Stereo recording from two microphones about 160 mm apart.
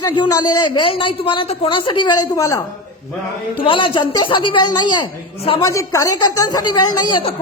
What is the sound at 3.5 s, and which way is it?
A woman's voice, 30° left (ahead or behind).